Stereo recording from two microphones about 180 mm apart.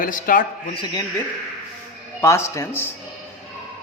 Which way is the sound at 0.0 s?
50° left (ahead or behind).